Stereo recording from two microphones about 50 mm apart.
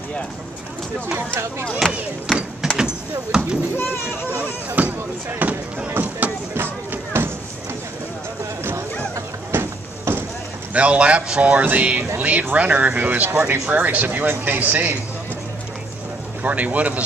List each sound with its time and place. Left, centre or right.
1.8 s speech: centre
2.3 s a sound: centre
2.8 s a sound: centre
3.7 s speech: left
4.4 s speech: right
6.5 s music: right
9.5 s a sound: right
10.7 s speech: right
11.6 s speech: right
16.4 s speech: right